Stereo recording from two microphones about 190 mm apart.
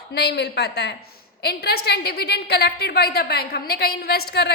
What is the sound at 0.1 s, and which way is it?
A woman's voice, 60° left (ahead or behind).